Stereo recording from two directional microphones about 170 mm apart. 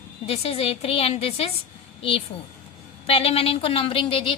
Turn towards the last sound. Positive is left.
turn(degrees=30)  # may be behind; listen again after turning